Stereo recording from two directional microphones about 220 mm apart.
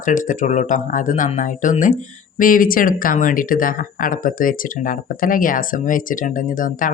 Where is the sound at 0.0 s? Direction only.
35° left (ahead or behind).